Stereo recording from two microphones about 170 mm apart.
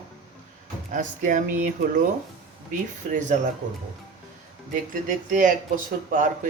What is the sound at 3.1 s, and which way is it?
Speech, 45° right (ahead or behind).